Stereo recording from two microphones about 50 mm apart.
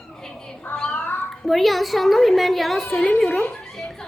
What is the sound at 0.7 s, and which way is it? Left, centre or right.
Cat, centre.